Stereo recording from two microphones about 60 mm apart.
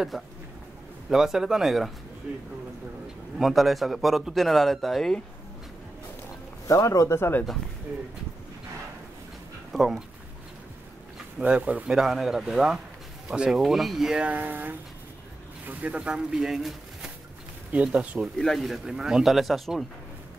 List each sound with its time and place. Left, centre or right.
0.1 s speech: centre
3.3 s speech: centre
6.7 s speech: left
7.2 s speech: left
9.7 s speech: centre
11.4 s speech: right
12.0 s speech: centre
14.1 s speech: right
16.3 s speech: centre
17.7 s speech: right
18.4 s speech: centre